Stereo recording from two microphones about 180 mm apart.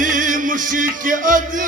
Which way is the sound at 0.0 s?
45° right (ahead or behind).